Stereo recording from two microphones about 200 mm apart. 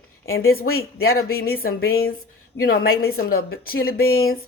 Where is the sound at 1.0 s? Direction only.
50° left (ahead or behind).